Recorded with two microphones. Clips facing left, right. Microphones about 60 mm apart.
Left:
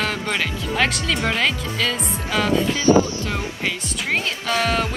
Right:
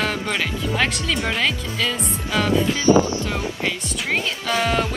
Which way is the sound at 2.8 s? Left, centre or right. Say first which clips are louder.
Even; right.